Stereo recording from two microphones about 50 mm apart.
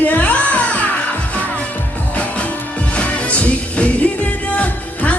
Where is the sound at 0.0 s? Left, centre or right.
Left.